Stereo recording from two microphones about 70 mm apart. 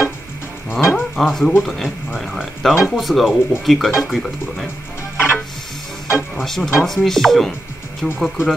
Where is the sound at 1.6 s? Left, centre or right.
Centre.